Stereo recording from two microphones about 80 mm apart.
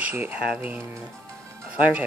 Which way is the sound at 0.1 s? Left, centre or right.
Right.